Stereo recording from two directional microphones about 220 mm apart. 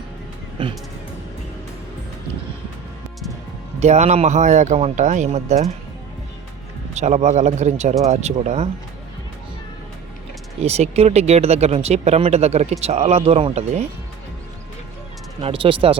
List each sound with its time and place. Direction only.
3.8 s speech: 30° right (ahead or behind)
6.9 s speech: 30° right (ahead or behind)
10.6 s speech: 30° right (ahead or behind)
15.4 s speech: 25° right (ahead or behind)